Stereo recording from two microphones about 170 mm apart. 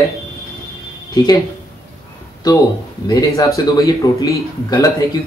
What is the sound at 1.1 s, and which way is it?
Speech, 25° left (ahead or behind).